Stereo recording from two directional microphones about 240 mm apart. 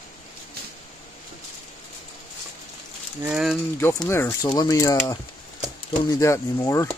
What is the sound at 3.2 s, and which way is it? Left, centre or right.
Speech, centre.